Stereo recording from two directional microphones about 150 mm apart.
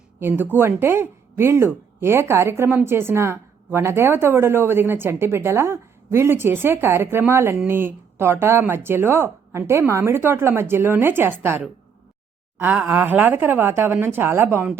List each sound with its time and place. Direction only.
0.2 s speech: 15° right (ahead or behind)